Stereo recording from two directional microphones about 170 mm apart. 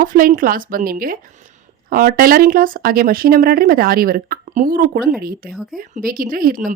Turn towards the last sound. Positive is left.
turn(degrees=-55)  # may be behind; listen again after turning